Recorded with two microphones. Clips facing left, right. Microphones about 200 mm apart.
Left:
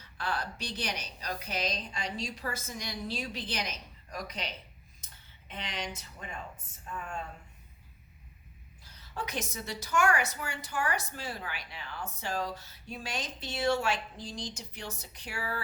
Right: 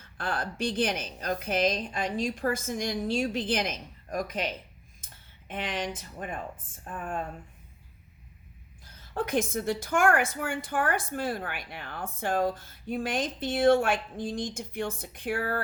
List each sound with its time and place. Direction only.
0.0 s a woman's voice: 50° right (ahead or behind)
9.1 s a woman's voice: 50° right (ahead or behind)